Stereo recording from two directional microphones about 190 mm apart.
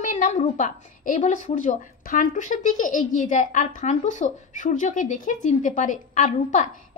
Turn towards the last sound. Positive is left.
turn(degrees=40)  # may be behind; listen again after turning